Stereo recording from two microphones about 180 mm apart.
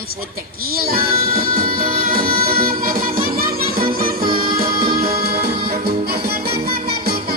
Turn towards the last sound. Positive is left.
turn(degrees=-60)  # may be behind; listen again after turning